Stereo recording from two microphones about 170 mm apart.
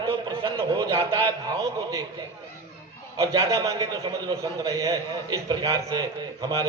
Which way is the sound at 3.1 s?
20° right (ahead or behind).